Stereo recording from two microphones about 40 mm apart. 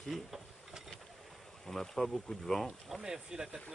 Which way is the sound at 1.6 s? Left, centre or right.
Centre.